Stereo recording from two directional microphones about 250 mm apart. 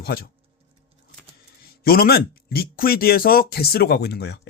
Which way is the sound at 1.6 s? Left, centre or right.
Left.